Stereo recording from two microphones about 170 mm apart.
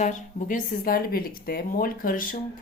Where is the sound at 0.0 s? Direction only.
50° left (ahead or behind).